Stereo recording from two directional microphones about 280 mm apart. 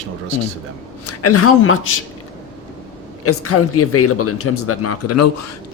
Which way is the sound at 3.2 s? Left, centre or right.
Left.